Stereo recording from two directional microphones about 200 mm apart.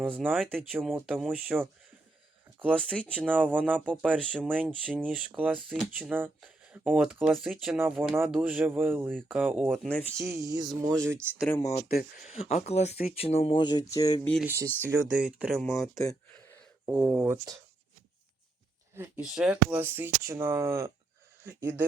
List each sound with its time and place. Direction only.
0.2 s speech: 10° right (ahead or behind)
2.7 s speech: 5° left (ahead or behind)
3.2 s speech: 10° right (ahead or behind)
10.2 s speech: 15° right (ahead or behind)
11.4 s speech: 10° left (ahead or behind)
11.9 s speech: 50° left (ahead or behind)
12.3 s speech: 30° left (ahead or behind); by 14.2 s 15° left (ahead or behind)
14.4 s speech: 15° right (ahead or behind)
16.3 s a sound: 10° left (ahead or behind)
16.8 s speech: centre (ahead or behind)
18.9 s speech: 10° right (ahead or behind)